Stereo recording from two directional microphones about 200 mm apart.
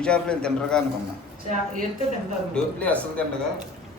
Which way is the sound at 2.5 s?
5° left (ahead or behind).